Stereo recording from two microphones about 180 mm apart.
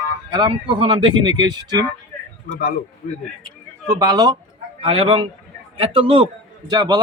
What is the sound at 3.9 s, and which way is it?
A man's voice, 20° right (ahead or behind).